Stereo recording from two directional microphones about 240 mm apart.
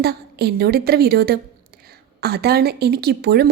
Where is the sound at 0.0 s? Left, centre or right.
Right.